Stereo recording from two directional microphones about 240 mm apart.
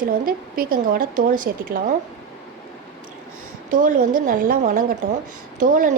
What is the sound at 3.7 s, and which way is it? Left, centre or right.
A woman's voice, right.